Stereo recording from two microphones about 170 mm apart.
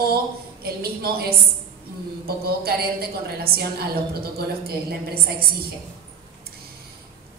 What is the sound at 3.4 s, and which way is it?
Speech, 65° right (ahead or behind).